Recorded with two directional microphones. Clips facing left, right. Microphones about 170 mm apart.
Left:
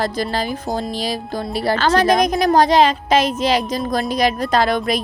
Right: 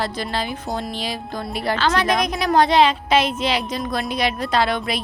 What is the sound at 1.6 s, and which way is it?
A woman's voice, 35° left (ahead or behind).